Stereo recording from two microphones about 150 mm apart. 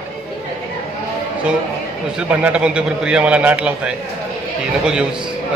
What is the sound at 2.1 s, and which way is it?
A man's voice, 5° right (ahead or behind).